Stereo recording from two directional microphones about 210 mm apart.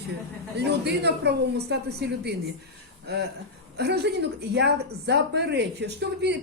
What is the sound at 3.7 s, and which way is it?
Speech, 50° right (ahead or behind).